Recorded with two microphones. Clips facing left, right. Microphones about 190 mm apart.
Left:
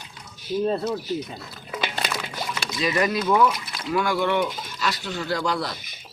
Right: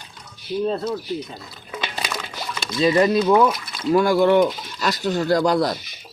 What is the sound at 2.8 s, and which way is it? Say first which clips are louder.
Speech: right 7 dB; 25° right (ahead or behind).